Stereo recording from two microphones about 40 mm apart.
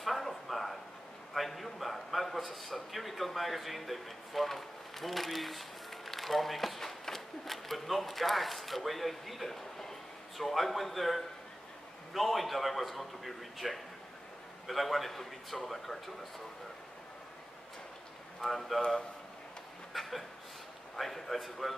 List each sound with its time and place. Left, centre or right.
0.0 s a sound: centre
12.1 s a man's voice: centre
18.4 s a man's voice: centre
19.9 s chuckle: centre
20.9 s a man's voice: centre